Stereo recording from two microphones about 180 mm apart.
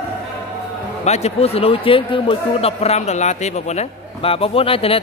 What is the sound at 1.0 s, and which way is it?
A man's voice, 35° left (ahead or behind).